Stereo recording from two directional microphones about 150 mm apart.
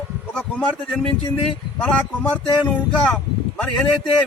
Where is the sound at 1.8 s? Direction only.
5° left (ahead or behind).